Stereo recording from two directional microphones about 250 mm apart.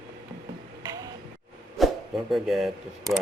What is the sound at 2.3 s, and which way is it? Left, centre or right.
Speech, centre.